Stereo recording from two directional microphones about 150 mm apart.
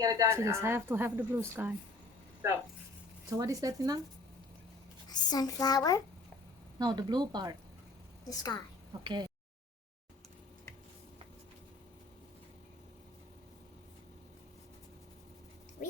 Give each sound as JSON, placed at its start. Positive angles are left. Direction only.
{"t": 0.0, "sound": "speech", "side_deg": -20}
{"t": 3.2, "sound": "speech", "side_deg": -20}
{"t": 5.0, "sound": "a child's voice", "side_deg": 25}
{"t": 6.7, "sound": "speech", "side_deg": -30}
{"t": 8.3, "sound": "a child's voice", "side_deg": 25}
{"t": 9.0, "sound": "speech", "side_deg": -30}
{"t": 15.8, "sound": "a sound", "side_deg": 60}